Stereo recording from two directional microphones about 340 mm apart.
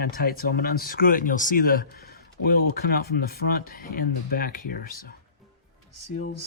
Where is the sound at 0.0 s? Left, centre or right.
Left.